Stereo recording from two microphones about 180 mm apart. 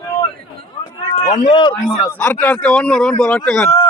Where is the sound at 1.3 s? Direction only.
25° left (ahead or behind).